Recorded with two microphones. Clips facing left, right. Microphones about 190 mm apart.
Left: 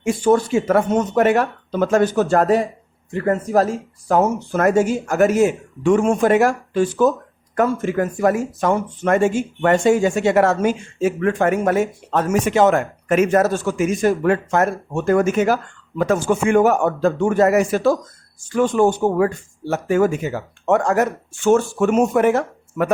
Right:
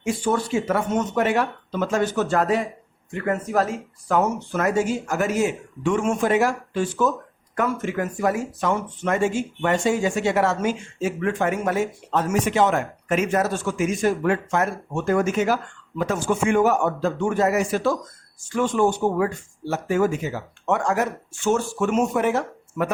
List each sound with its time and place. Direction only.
0.0 s speech: 50° left (ahead or behind)
4.5 s speech: 50° left (ahead or behind)
18.5 s speech: 40° left (ahead or behind)